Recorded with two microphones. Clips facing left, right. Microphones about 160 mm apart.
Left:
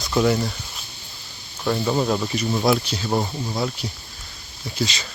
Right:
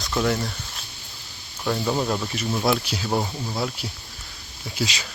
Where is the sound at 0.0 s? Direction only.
Centre (ahead or behind).